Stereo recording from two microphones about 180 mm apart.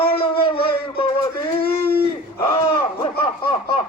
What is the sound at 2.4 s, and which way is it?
Speech, 30° left (ahead or behind).